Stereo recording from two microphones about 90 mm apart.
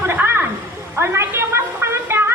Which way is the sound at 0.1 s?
25° right (ahead or behind).